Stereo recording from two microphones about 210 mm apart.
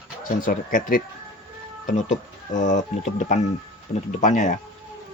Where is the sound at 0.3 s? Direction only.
40° left (ahead or behind).